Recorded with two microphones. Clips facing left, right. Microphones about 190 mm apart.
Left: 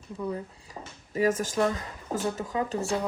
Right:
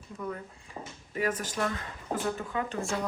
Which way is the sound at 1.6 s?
30° left (ahead or behind).